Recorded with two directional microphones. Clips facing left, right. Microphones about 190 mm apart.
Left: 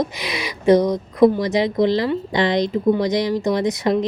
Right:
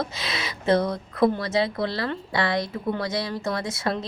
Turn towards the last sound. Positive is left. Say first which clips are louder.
# left 9 dB
turn(degrees=15)  # may be behind; listen again after turning